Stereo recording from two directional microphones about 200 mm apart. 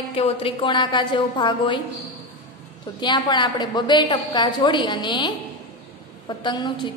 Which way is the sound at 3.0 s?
20° left (ahead or behind).